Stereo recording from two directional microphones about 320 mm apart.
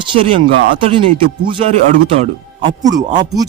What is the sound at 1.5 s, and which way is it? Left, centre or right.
Speech, centre.